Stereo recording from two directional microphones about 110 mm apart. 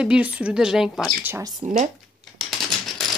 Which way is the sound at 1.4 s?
35° right (ahead or behind).